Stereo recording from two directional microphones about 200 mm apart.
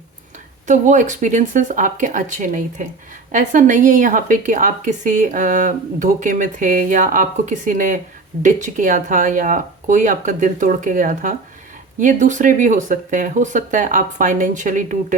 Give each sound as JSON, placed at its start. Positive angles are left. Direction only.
{"t": 0.7, "sound": "a woman's voice", "side_deg": -40}